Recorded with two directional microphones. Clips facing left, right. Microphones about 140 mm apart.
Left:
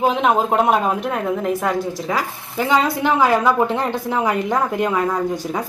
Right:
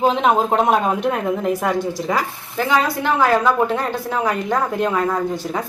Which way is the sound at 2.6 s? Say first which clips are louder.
Left 1 dB; 20° left (ahead or behind).